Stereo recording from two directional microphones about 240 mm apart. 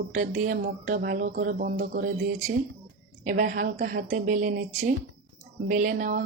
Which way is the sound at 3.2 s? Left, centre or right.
Right.